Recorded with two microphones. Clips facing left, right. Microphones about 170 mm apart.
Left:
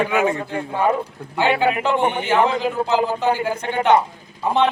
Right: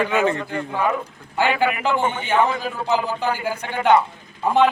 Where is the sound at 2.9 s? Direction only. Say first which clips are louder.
Left 4 dB; 25° left (ahead or behind).